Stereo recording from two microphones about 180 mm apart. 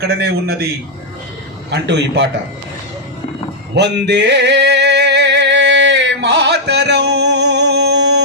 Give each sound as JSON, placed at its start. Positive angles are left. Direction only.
{"t": 0.2, "sound": "a man's voice", "side_deg": -65}
{"t": 1.7, "sound": "a man's voice", "side_deg": -75}
{"t": 3.8, "sound": "music", "side_deg": -70}